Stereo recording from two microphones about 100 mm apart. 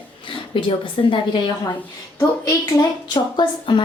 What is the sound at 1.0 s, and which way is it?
Speech, 70° left (ahead or behind).